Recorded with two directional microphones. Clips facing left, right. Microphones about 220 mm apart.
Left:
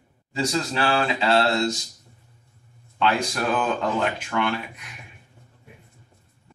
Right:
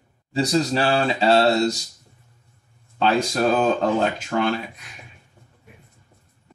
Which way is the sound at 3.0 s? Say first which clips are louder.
Right 4 dB; 35° right (ahead or behind).